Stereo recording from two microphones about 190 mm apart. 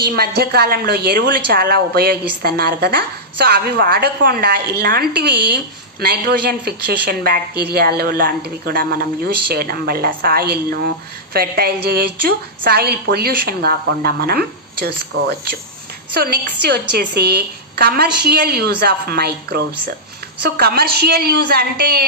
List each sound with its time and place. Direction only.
0.0 s a woman's voice: 55° right (ahead or behind)